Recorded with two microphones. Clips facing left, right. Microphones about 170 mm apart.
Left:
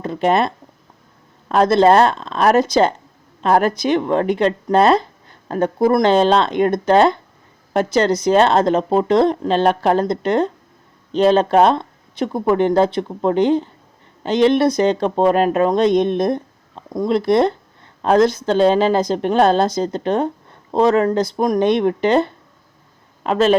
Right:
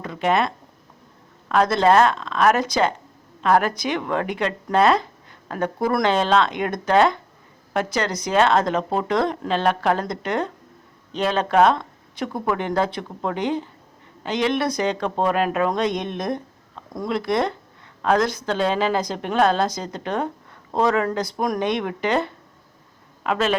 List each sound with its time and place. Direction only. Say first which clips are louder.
0.0 s a woman's voice: left 4 dB; 35° left (ahead or behind)